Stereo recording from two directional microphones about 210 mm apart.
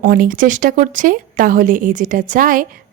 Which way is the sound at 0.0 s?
40° right (ahead or behind).